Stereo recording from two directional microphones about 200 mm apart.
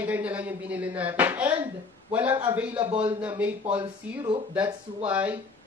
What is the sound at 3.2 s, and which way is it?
Speech, 5° right (ahead or behind).